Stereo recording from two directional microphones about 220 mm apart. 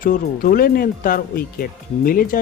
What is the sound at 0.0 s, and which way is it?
Speech, 40° left (ahead or behind).